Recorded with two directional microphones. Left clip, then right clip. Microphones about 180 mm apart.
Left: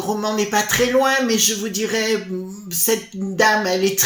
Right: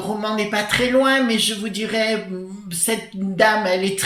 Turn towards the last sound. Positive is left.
turn(degrees=45)  # may be behind; listen again after turning